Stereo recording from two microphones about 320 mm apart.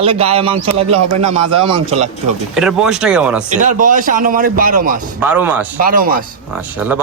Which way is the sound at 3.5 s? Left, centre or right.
Right.